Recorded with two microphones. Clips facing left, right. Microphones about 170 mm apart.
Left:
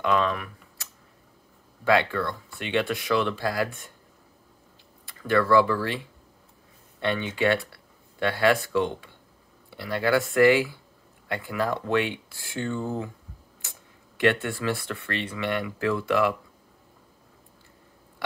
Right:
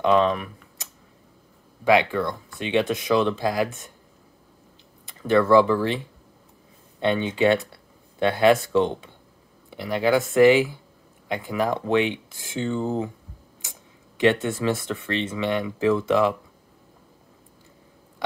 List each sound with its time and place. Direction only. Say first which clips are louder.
0.0 s speech: right 5 dB; 20° right (ahead or behind)
1.9 s speech: right 3 dB; 15° right (ahead or behind)
5.0 s speech: right 4 dB; 20° right (ahead or behind)